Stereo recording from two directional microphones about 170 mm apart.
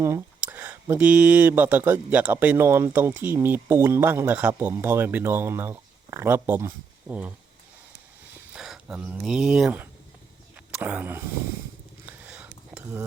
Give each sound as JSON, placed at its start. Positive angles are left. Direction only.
{"t": 0.0, "sound": "speech", "side_deg": -15}
{"t": 8.5, "sound": "speech", "side_deg": -5}
{"t": 12.0, "sound": "a sound", "side_deg": -10}